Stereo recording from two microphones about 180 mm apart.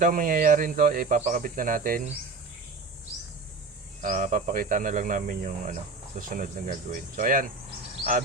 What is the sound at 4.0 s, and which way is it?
Speech, 45° right (ahead or behind).